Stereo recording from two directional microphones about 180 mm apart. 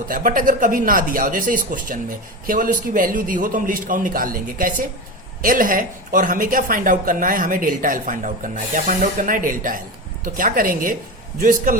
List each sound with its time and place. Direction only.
0.1 s speech: 50° right (ahead or behind)